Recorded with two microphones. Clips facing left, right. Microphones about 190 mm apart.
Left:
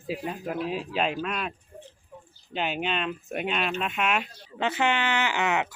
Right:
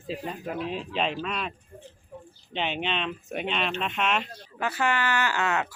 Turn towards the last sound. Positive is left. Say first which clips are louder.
# left 1 dB
turn(degrees=20)  # may be behind; listen again after turning